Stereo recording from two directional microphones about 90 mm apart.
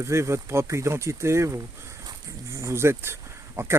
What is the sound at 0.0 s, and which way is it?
Speech, 30° right (ahead or behind).